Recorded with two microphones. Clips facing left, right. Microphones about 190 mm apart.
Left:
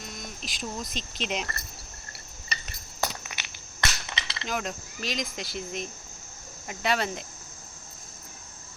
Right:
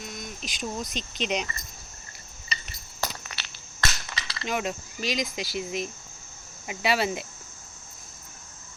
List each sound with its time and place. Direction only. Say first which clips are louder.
0.0 s a sound: right 2 dB; centre (ahead or behind)
0.9 s speech: right 3 dB; centre (ahead or behind)
3.0 s crushing: left 1 dB; 15° left (ahead or behind)
4.4 s speech: right 3 dB; 5° right (ahead or behind)